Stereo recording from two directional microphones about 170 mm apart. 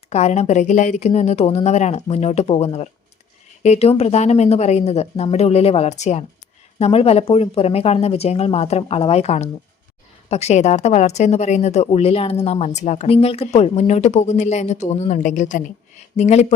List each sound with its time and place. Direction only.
0.1 s a woman's voice: 40° left (ahead or behind)